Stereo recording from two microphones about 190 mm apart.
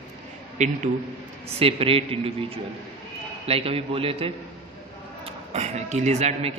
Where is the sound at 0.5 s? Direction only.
40° right (ahead or behind).